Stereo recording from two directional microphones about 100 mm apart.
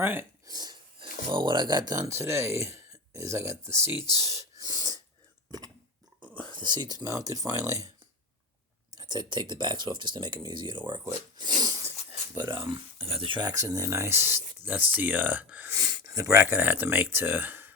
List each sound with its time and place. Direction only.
0.0 s speech: 20° right (ahead or behind)
0.4 s a sound: 40° right (ahead or behind)
0.9 s speech: 50° right (ahead or behind); by 3.9 s 25° right (ahead or behind)
3.9 s speech: 45° left (ahead or behind)
4.2 s a sound: 30° right (ahead or behind)
6.5 s speech: 50° right (ahead or behind)
8.9 s speech: 40° right (ahead or behind)
11.3 s a sound: 45° right (ahead or behind)
12.3 s speech: 45° right (ahead or behind)
12.7 s speech: 75° right (ahead or behind)
13.4 s speech: 35° right (ahead or behind); by 15.7 s 15° right (ahead or behind)
15.7 s speech: 35° right (ahead or behind); by 17.7 s 20° right (ahead or behind)